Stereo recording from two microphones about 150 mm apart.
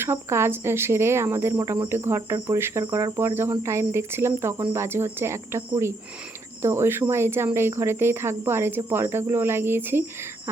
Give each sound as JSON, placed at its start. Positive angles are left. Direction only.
{"t": 0.0, "sound": "speech", "side_deg": -15}